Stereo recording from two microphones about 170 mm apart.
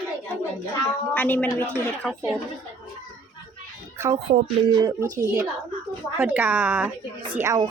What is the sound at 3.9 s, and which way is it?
Music, 15° right (ahead or behind).